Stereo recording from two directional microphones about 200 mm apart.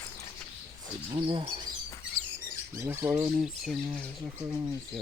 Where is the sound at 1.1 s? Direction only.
25° right (ahead or behind).